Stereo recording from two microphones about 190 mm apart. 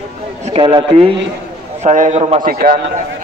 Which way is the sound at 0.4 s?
30° right (ahead or behind).